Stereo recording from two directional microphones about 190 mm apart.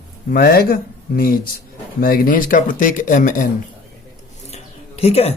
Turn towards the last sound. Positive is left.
turn(degrees=35)  # may be behind; listen again after turning